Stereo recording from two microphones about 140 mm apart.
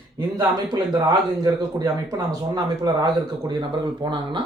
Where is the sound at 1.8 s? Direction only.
25° right (ahead or behind).